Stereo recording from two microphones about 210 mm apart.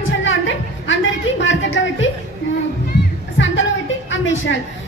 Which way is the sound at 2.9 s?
55° left (ahead or behind).